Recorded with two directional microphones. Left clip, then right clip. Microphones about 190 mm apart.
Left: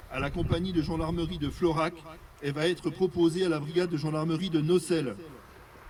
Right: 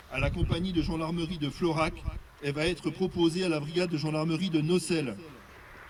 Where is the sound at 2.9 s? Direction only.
15° right (ahead or behind).